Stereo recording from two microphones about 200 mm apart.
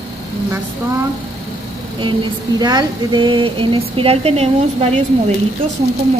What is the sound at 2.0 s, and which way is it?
A woman's voice, 20° right (ahead or behind).